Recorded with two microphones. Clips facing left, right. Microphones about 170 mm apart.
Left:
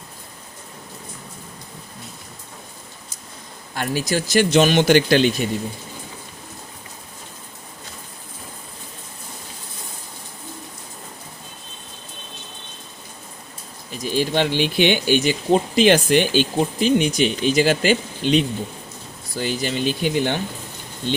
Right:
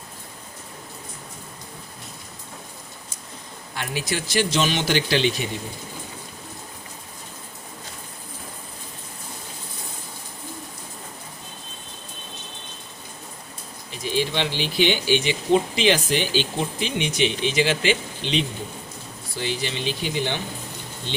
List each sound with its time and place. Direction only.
3.8 s speech: 40° left (ahead or behind)
13.9 s speech: 45° left (ahead or behind)